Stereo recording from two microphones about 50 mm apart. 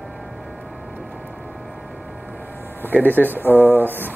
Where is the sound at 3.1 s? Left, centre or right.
Right.